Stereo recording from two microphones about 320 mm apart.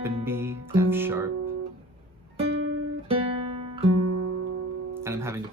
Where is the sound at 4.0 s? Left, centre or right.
Right.